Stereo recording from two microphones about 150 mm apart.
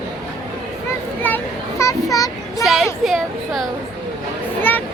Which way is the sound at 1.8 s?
20° left (ahead or behind).